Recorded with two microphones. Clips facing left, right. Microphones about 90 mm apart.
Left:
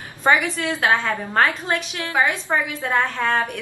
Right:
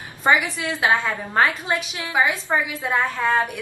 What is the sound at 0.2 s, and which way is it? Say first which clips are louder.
A woman's voice: left 1 dB; 10° right (ahead or behind).